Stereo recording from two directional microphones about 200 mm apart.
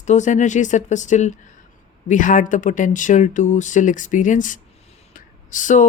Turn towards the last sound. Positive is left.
turn(degrees=40)  # may be behind; listen again after turning